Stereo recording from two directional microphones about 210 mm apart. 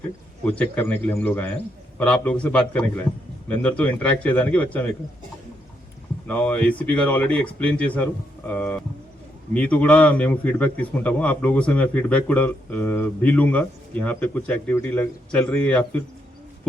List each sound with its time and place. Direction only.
0.4 s a man's voice: 10° left (ahead or behind)
6.2 s a man's voice: 10° left (ahead or behind)